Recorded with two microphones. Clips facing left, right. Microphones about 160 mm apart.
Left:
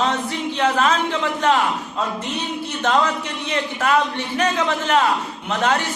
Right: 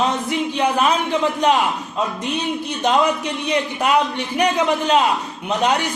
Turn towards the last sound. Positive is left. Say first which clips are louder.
# right 2 dB
turn(degrees=-15)  # may be behind; listen again after turning